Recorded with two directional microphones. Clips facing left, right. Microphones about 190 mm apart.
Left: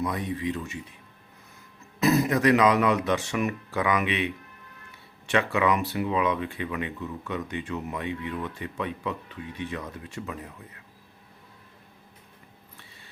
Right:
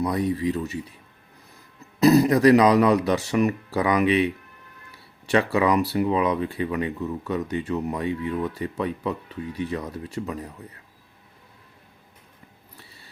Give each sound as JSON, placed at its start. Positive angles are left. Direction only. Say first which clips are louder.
{"t": 0.0, "sound": "speech", "louder": "right 6 dB", "side_deg": -35}
{"t": 2.0, "sound": "speech", "louder": "right 6 dB", "side_deg": -35}